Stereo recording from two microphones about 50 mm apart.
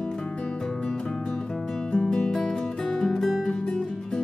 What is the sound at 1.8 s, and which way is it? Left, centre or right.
Music, left.